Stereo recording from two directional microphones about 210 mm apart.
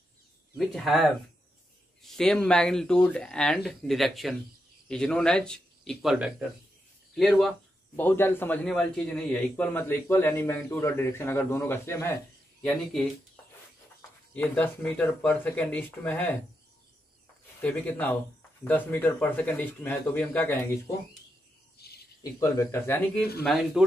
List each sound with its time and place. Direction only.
0.6 s speech: centre (ahead or behind)
7.2 s a man's voice: centre (ahead or behind)
14.3 s a man's voice: 5° left (ahead or behind)
17.6 s a man's voice: 5° left (ahead or behind)
21.7 s cricket: 50° left (ahead or behind)
22.2 s a man's voice: 15° left (ahead or behind)
23.4 s speech: centre (ahead or behind)